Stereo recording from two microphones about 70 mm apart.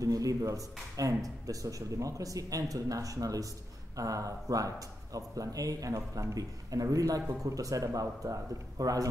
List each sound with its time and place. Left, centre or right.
0.0 s speech: right